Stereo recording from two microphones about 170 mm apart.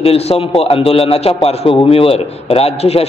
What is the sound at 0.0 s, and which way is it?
A man's voice, 35° left (ahead or behind).